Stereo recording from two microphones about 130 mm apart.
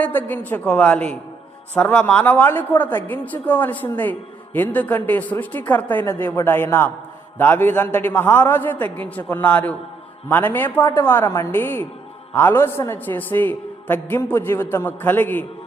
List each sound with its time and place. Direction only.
0.0 s a man's voice: 15° left (ahead or behind)